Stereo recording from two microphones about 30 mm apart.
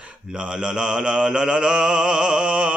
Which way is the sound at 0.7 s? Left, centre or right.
Right.